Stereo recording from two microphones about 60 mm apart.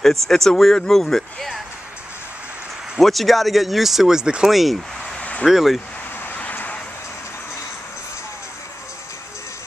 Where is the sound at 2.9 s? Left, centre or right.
Centre.